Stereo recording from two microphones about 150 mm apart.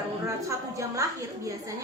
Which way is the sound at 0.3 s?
20° right (ahead or behind).